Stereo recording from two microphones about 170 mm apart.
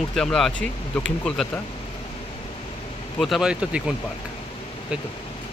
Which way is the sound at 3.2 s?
Centre (ahead or behind).